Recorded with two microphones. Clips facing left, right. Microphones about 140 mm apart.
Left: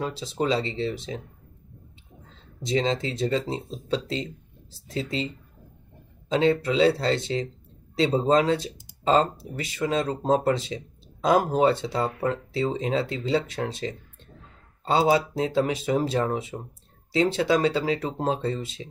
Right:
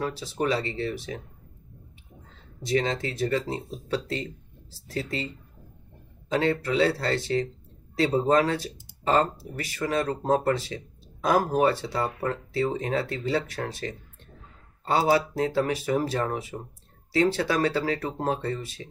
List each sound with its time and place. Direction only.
0.0 s speech: 20° left (ahead or behind)
2.6 s speech: 20° left (ahead or behind)